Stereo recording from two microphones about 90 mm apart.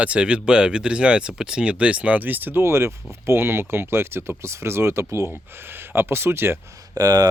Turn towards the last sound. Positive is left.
turn(degrees=-45)  # may be behind; listen again after turning